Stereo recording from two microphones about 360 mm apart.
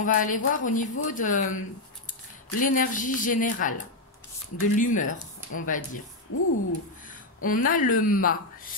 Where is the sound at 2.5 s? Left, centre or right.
Left.